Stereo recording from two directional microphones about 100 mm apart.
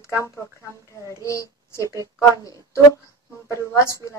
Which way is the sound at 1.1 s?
30° left (ahead or behind).